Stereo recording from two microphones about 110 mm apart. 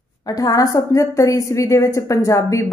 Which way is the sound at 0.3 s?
35° left (ahead or behind).